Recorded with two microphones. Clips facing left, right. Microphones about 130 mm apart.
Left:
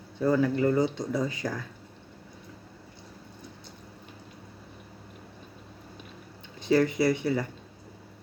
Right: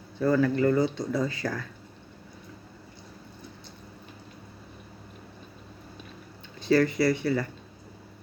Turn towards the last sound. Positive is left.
turn(degrees=20)  # may be behind; listen again after turning